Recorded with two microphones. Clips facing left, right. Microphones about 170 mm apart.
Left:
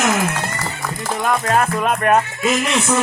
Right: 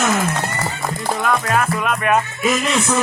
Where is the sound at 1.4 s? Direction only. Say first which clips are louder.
Left 2 dB; 30° left (ahead or behind).